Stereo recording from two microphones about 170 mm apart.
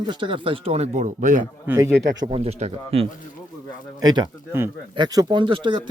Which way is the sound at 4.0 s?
20° right (ahead or behind).